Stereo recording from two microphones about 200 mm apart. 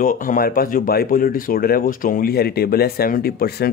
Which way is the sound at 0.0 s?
40° left (ahead or behind).